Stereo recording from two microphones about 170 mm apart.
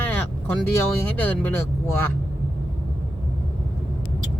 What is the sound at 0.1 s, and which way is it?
Speech, 10° left (ahead or behind).